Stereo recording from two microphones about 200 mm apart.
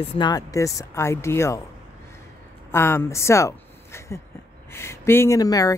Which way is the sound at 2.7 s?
10° left (ahead or behind).